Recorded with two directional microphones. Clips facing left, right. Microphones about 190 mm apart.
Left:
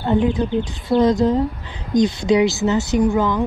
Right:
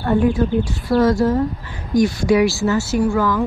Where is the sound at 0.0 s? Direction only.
20° left (ahead or behind).